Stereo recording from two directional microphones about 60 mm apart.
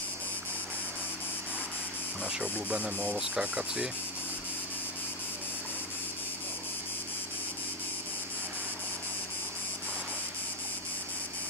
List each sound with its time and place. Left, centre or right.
2.2 s speech: right
3.2 s speech: centre